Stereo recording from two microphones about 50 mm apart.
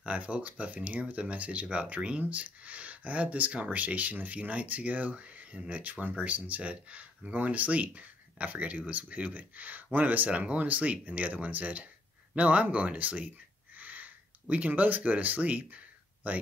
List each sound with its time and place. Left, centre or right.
0.0 s speech: right